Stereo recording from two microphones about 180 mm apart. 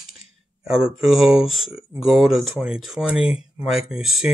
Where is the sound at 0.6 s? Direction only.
5° right (ahead or behind).